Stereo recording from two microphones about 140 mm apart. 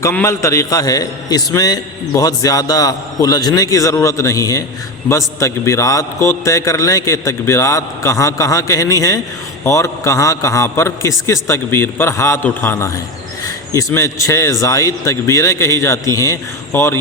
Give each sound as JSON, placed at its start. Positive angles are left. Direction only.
{"t": 0.0, "sound": "a man's voice", "side_deg": 15}